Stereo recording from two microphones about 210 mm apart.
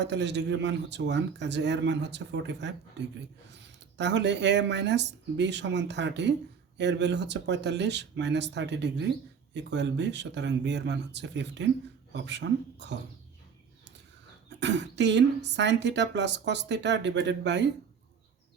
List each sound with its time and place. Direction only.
0.0 s speech: 55° right (ahead or behind)
3.9 s speech: 55° right (ahead or behind)
14.6 s speech: 55° right (ahead or behind)